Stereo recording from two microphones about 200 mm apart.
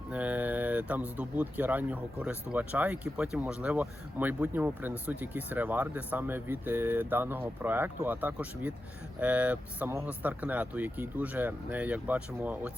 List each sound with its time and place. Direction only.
0.1 s speech: 5° right (ahead or behind)